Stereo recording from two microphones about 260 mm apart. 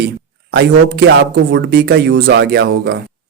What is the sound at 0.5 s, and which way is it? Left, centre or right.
Speech, right.